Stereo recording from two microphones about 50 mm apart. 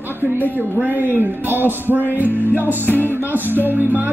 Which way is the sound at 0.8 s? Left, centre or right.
Right.